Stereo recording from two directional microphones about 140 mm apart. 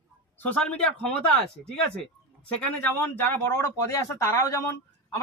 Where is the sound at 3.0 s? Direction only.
15° left (ahead or behind).